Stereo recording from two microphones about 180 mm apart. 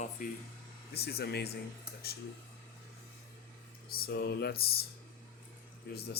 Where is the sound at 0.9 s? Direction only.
60° left (ahead or behind).